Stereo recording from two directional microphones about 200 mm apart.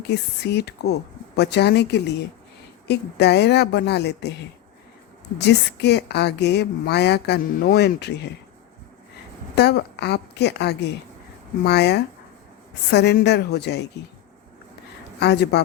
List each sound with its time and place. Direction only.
0.1 s a woman's voice: 55° left (ahead or behind)
9.6 s a woman's voice: 55° left (ahead or behind)
15.2 s a woman's voice: 55° left (ahead or behind)